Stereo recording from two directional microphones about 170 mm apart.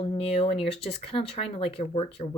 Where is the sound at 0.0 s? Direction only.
35° left (ahead or behind).